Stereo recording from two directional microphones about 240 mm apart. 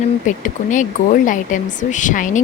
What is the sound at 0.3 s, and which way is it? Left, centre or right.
Speech, left.